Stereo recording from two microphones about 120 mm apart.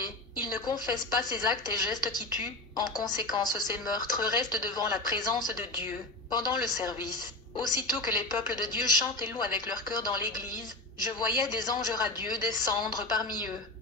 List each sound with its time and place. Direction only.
0.0 s a woman's voice: 35° left (ahead or behind)